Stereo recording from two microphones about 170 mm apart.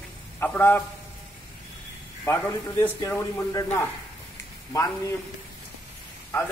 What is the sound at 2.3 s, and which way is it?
A man's voice, 15° left (ahead or behind).